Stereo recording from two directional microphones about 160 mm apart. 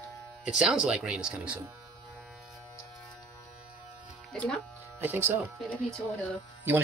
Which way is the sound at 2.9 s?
Centre (ahead or behind).